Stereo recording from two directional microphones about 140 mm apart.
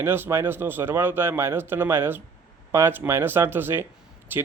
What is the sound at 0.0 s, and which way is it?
A man's voice, 15° right (ahead or behind).